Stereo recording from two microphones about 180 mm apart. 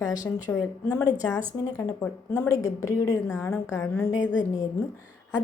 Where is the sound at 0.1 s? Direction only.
20° left (ahead or behind).